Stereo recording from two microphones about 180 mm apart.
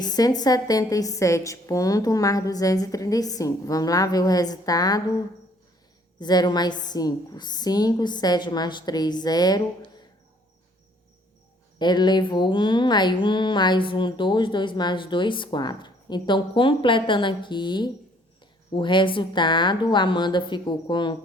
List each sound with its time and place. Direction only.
0.0 s speech: 20° left (ahead or behind)
6.1 s speech: 20° left (ahead or behind)
11.8 s speech: 25° left (ahead or behind)